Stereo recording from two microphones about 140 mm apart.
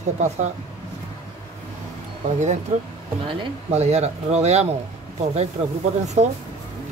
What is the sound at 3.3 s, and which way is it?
Speech, 50° right (ahead or behind).